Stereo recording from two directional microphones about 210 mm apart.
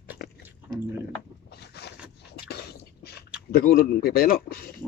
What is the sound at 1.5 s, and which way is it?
Boat, 50° left (ahead or behind).